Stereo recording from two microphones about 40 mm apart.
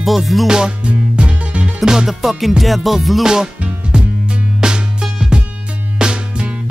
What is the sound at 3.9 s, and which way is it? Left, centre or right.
Music, right.